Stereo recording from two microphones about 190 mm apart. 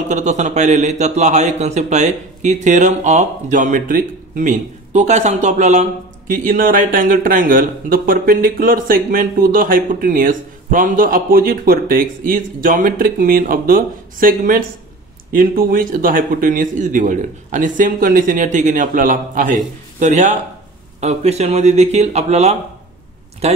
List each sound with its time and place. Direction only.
0.1 s a man's voice: 40° right (ahead or behind)